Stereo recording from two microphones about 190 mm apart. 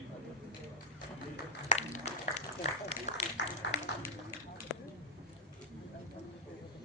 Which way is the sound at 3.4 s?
65° left (ahead or behind).